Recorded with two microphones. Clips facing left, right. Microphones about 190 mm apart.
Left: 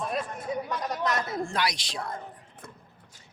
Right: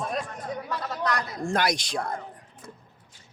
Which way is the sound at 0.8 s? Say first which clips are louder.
Right 2 dB; 20° left (ahead or behind).